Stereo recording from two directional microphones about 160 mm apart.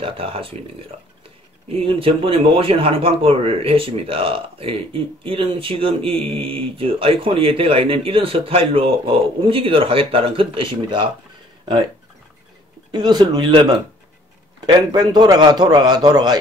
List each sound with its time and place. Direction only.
0.0 s speech: 35° right (ahead or behind)
12.9 s a man's voice: 25° right (ahead or behind)